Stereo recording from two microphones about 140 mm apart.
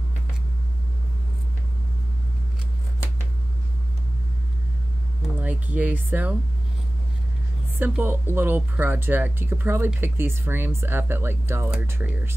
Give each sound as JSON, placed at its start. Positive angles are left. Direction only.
{"t": 5.4, "sound": "speech", "side_deg": -10}
{"t": 7.8, "sound": "speech", "side_deg": -15}